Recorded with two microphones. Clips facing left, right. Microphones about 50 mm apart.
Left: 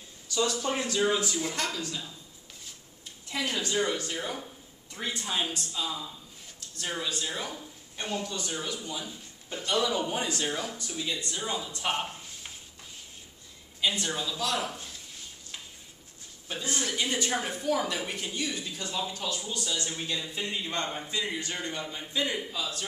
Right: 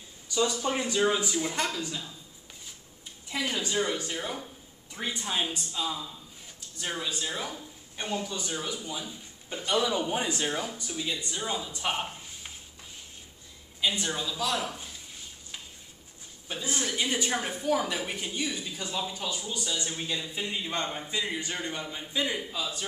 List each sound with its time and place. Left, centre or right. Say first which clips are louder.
0.3 s a woman's voice: right 1 dB; centre
3.3 s a woman's voice: even; centre
6.8 s a woman's voice: even; centre
11.8 s a sound: even; centre
13.7 s a man's voice: even; centre
14.7 s speech: even; centre
16.4 s a woman's voice: even; centre